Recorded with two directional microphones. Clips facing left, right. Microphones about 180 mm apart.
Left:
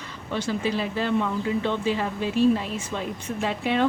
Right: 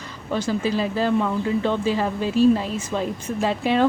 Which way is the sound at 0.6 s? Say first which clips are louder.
Right 4 dB; 40° right (ahead or behind).